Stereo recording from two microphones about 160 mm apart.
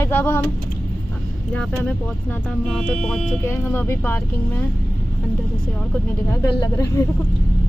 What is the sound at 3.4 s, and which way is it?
Speech, 15° left (ahead or behind).